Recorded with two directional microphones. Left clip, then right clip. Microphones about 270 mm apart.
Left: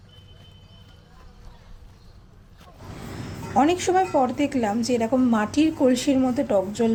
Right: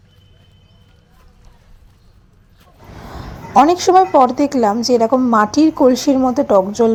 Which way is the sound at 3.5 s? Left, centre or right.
Centre.